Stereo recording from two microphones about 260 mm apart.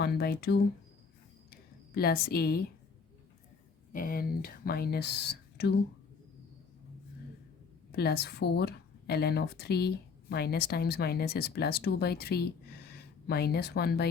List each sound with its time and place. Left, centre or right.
0.0 s speech: left
2.0 s speech: left
3.9 s speech: left
7.9 s speech: left